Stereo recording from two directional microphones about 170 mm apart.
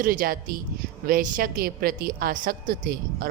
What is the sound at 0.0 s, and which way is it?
A woman's voice, 55° right (ahead or behind).